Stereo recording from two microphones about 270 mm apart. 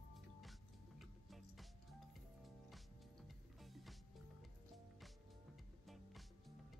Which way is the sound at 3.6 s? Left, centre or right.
Centre.